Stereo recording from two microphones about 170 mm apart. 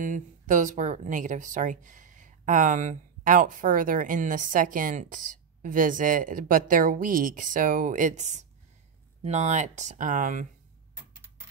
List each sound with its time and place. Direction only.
0.0 s speech: 50° right (ahead or behind)